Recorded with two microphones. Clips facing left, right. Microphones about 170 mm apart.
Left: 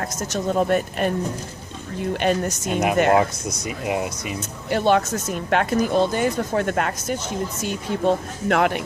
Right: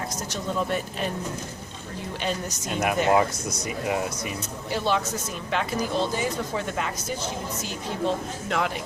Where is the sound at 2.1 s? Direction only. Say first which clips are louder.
Left 8 dB; 60° left (ahead or behind).